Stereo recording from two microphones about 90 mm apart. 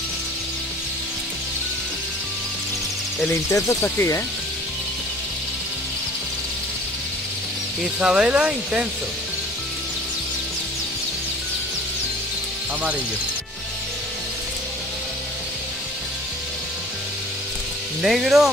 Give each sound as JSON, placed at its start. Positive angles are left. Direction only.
{"t": 3.3, "sound": "speech", "side_deg": 35}
{"t": 8.0, "sound": "speech", "side_deg": -10}
{"t": 18.0, "sound": "speech", "side_deg": 0}